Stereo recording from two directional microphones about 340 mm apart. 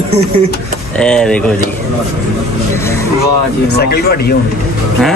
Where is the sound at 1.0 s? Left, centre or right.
Centre.